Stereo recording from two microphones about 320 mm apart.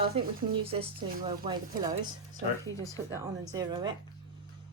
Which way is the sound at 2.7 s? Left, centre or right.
Right.